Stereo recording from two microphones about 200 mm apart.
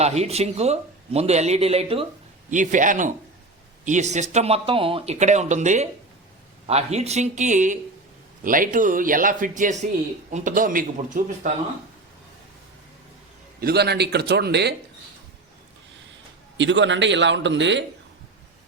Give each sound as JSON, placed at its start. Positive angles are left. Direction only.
{"t": 0.0, "sound": "speech", "side_deg": -30}
{"t": 13.6, "sound": "a man's voice", "side_deg": -55}
{"t": 16.6, "sound": "a man's voice", "side_deg": -65}